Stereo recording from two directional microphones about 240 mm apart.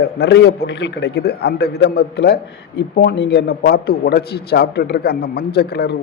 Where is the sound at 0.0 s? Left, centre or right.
Left.